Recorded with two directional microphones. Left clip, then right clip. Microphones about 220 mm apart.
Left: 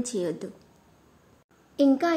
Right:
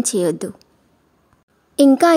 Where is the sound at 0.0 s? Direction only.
55° right (ahead or behind).